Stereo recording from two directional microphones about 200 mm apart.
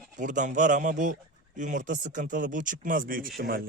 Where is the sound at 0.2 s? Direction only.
40° right (ahead or behind).